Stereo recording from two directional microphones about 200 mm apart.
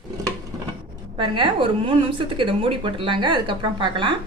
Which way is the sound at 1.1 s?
25° right (ahead or behind).